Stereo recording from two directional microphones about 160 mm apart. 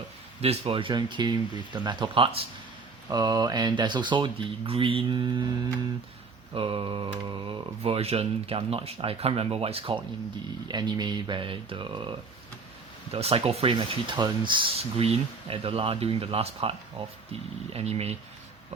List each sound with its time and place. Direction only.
0.4 s speech: 35° right (ahead or behind)
10.7 s speech: 25° right (ahead or behind)
13.1 s speech: 40° right (ahead or behind)